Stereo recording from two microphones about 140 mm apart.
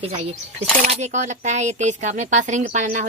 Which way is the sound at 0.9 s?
50° right (ahead or behind).